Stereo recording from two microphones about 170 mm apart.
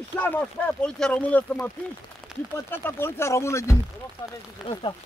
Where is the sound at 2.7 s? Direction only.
10° left (ahead or behind).